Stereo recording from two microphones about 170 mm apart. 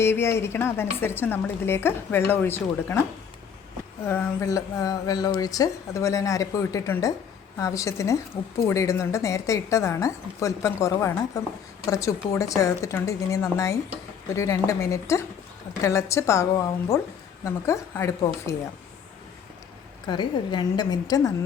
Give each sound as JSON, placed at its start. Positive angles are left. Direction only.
{"t": 0.0, "sound": "a woman's voice", "side_deg": 15}
{"t": 4.0, "sound": "a woman's voice", "side_deg": 10}
{"t": 20.1, "sound": "speech", "side_deg": 25}